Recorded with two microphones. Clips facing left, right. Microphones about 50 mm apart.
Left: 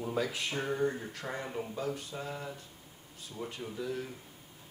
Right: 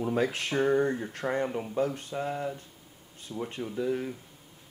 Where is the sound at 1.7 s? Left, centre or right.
Right.